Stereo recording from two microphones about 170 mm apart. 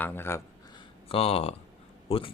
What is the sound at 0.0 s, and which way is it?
Speech, 10° left (ahead or behind).